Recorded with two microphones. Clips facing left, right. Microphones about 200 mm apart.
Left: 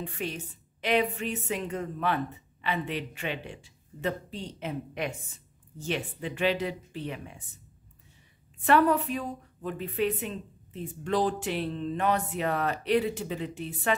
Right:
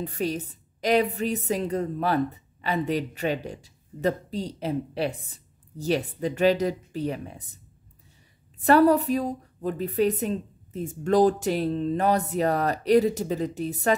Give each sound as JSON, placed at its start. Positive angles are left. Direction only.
{"t": 0.0, "sound": "a woman's voice", "side_deg": -40}
{"t": 8.5, "sound": "a woman's voice", "side_deg": -40}